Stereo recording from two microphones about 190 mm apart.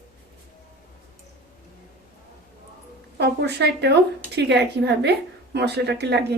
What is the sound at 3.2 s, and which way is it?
A woman's voice, 60° right (ahead or behind).